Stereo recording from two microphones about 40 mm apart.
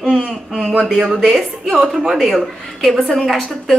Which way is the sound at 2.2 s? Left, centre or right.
Centre.